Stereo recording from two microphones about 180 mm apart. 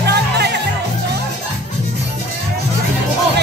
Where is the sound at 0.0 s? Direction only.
65° right (ahead or behind).